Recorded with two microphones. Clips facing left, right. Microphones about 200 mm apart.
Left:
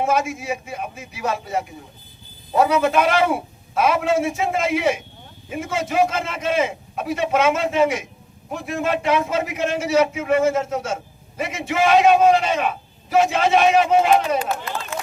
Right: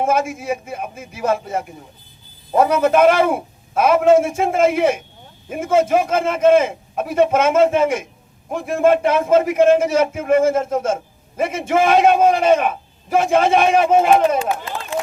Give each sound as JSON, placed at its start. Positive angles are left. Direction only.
{"t": 0.0, "sound": "a man's voice", "side_deg": -50}